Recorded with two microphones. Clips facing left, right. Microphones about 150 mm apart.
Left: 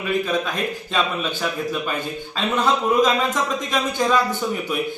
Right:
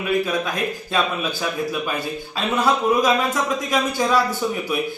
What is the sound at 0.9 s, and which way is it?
A man's voice, 10° right (ahead or behind).